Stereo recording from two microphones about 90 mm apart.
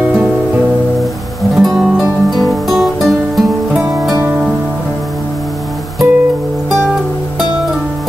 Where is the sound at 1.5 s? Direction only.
Centre (ahead or behind).